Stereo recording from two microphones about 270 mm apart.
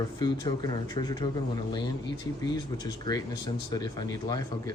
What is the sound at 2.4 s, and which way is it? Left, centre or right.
Speech, centre.